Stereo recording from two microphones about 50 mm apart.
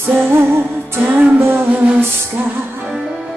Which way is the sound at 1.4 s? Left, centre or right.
Right.